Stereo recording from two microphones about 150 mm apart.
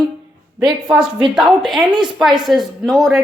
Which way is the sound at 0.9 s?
5° right (ahead or behind).